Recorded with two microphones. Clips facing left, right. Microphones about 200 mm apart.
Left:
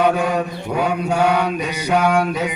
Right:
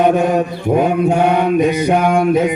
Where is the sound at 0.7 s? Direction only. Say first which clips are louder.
Right 5 dB; 50° right (ahead or behind).